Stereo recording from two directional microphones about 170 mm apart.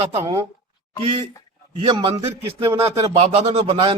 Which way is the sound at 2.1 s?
15° right (ahead or behind).